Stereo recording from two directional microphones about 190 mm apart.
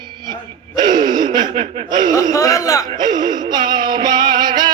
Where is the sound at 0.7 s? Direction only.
25° right (ahead or behind).